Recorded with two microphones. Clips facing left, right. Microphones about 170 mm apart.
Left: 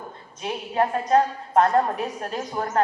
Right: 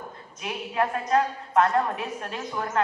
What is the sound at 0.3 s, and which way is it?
A woman's voice, 30° left (ahead or behind).